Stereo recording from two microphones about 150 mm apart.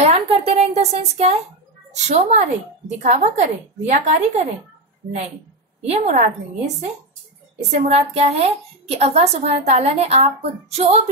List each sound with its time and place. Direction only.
0.5 s a woman's voice: 45° right (ahead or behind)
5.8 s a woman's voice: 45° right (ahead or behind)